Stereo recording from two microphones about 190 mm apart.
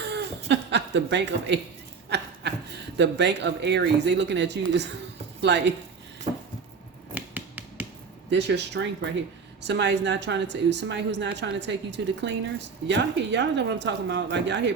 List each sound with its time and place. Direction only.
0.1 s a sound: 65° right (ahead or behind)
3.0 s speech: 65° right (ahead or behind)
7.1 s finger snapping: 10° right (ahead or behind)
8.3 s speech: 65° right (ahead or behind)